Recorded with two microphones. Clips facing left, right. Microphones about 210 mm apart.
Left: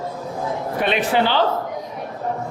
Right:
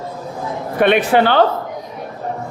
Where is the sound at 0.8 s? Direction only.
60° right (ahead or behind).